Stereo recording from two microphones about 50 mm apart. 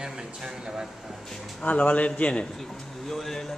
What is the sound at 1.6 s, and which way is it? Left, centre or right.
Speech, left.